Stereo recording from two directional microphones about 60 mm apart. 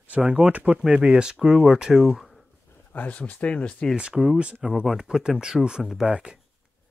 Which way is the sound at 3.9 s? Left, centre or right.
Centre.